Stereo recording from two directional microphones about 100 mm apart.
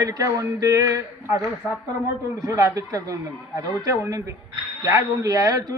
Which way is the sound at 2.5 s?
35° right (ahead or behind).